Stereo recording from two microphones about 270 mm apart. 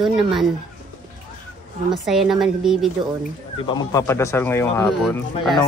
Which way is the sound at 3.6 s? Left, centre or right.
Centre.